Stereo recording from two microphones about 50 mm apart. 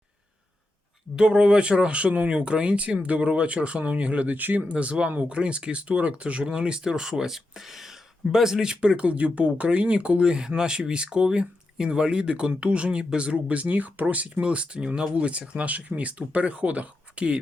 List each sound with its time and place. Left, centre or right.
1.1 s speech: centre; by 4.6 s right
4.7 s speech: right